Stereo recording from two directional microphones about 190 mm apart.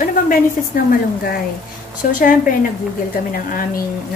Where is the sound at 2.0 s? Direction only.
45° left (ahead or behind).